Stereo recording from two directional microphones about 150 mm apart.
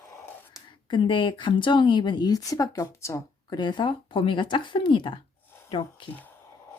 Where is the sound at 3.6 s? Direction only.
30° left (ahead or behind).